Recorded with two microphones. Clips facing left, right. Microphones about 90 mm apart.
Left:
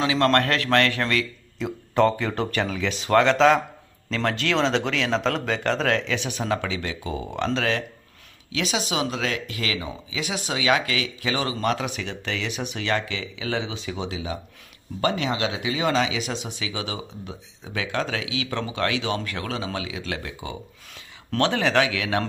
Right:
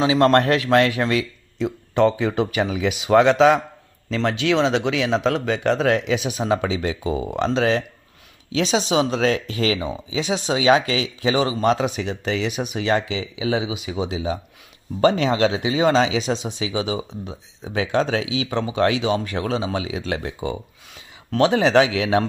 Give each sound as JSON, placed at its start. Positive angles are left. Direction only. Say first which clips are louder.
{"t": 0.0, "sound": "speech", "louder": "right 5 dB", "side_deg": -25}
{"t": 1.6, "sound": "speech", "louder": "right 2 dB", "side_deg": 0}
{"t": 8.5, "sound": "speech", "louder": "right 6 dB", "side_deg": -30}